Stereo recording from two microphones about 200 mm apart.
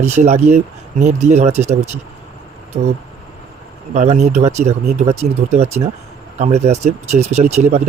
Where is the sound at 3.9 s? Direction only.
35° right (ahead or behind).